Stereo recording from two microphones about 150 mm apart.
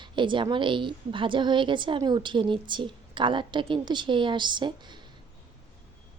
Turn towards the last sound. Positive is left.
turn(degrees=-30)  # may be behind; listen again after turning